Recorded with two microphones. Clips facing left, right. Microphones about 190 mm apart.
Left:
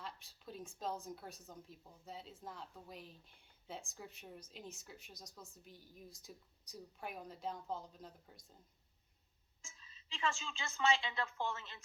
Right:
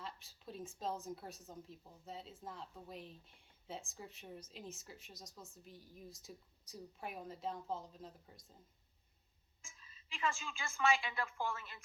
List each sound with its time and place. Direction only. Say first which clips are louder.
0.0 s speech: right 1 dB; centre (ahead or behind)
9.6 s a woman's voice: left 1 dB; 25° left (ahead or behind)